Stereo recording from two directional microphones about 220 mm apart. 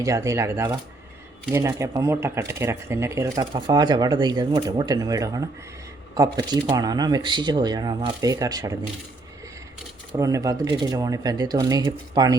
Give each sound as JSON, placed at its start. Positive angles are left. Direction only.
{"t": 0.0, "sound": "speech", "side_deg": -15}
{"t": 10.1, "sound": "speech", "side_deg": -15}